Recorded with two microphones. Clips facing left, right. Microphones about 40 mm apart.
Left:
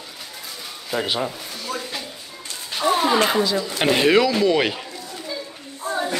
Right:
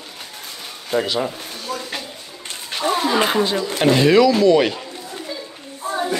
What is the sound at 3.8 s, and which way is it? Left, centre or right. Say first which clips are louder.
Speech: right 3 dB; left.